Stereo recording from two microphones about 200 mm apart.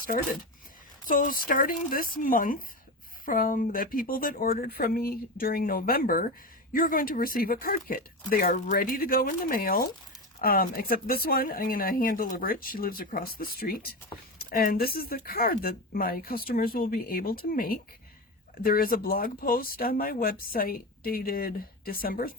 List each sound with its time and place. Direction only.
1.0 s speech: 45° left (ahead or behind)